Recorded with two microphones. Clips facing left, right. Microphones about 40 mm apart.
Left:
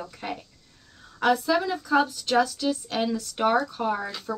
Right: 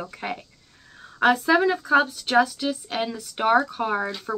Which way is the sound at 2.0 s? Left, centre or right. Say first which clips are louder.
Right 2 dB; centre.